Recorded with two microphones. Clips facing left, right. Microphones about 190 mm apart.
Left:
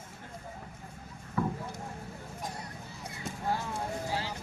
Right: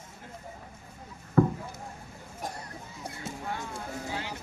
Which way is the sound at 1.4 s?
55° right (ahead or behind).